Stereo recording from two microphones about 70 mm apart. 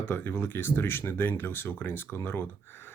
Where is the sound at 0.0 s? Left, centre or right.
Left.